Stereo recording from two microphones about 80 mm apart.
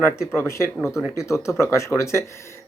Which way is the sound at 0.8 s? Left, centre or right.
Centre.